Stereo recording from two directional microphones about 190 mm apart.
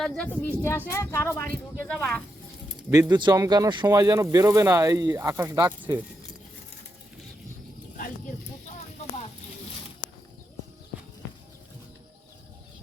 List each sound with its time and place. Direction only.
0.0 s speech: 5° left (ahead or behind)
0.6 s speech: 15° left (ahead or behind)
2.9 s speech: 20° right (ahead or behind)